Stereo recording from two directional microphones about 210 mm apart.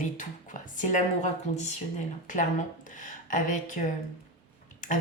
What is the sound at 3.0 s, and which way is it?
Speech, 40° left (ahead or behind).